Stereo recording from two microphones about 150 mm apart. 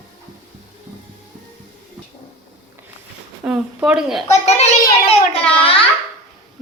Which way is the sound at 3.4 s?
5° right (ahead or behind).